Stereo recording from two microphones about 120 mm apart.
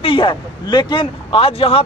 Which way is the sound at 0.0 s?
45° left (ahead or behind).